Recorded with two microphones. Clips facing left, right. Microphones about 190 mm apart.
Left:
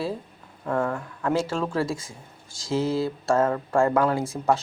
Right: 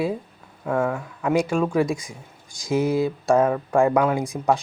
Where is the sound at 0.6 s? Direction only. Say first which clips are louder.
Right 3 dB; centre (ahead or behind).